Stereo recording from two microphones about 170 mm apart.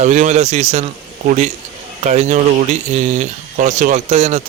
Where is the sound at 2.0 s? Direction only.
40° right (ahead or behind).